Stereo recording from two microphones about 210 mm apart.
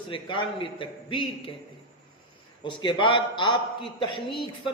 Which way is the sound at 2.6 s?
25° left (ahead or behind).